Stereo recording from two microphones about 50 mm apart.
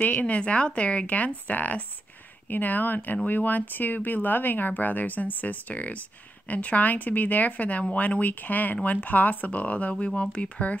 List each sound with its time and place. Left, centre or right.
0.0 s speech: left